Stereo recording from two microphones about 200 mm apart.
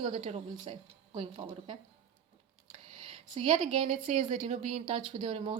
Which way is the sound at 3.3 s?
25° right (ahead or behind).